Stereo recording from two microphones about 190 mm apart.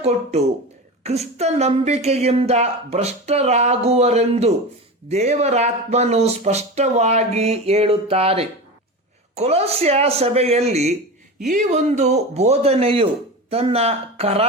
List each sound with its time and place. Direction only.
0.0 s speech: 35° right (ahead or behind)